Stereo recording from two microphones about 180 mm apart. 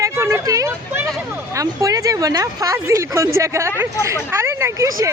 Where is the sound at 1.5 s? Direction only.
20° right (ahead or behind).